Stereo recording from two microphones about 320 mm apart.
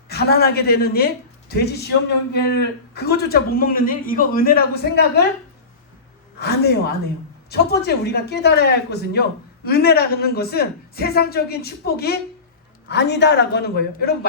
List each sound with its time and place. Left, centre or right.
0.1 s a man's voice: left
6.4 s a man's voice: left